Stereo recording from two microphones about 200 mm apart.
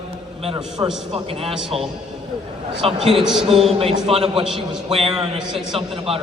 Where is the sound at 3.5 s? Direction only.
30° right (ahead or behind).